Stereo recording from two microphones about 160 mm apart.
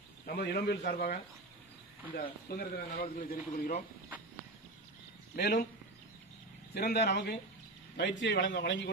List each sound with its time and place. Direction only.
0.3 s a man's voice: 75° left (ahead or behind)
2.1 s speech: 70° left (ahead or behind); by 3.7 s 55° left (ahead or behind)
5.3 s speech: 70° left (ahead or behind)
6.7 s a man's voice: 85° left